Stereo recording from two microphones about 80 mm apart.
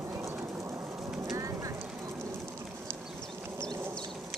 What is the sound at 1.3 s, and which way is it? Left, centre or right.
Rain, right.